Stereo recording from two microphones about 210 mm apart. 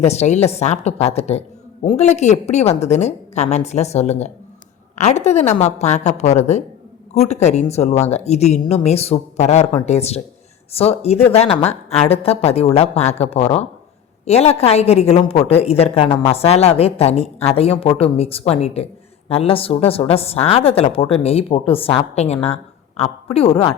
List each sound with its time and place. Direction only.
0.0 s a woman's voice: 30° left (ahead or behind)